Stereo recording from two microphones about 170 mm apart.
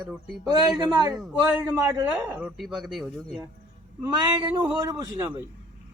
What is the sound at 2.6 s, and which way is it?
Speech, centre (ahead or behind).